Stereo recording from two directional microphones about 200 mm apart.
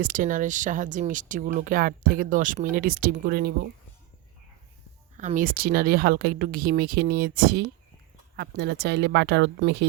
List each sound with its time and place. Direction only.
0.0 s speech: 40° right (ahead or behind)
5.1 s speech: 40° right (ahead or behind); by 9.8 s 60° right (ahead or behind)